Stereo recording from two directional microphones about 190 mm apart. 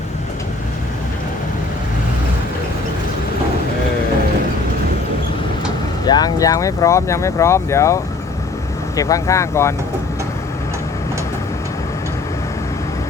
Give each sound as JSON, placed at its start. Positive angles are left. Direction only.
{"t": 6.1, "sound": "speech", "side_deg": 20}